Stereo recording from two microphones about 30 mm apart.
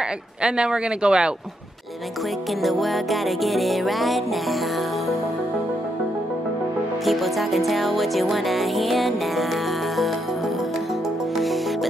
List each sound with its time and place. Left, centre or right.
0.4 s speech: right
2.6 s music: centre
7.1 s music: centre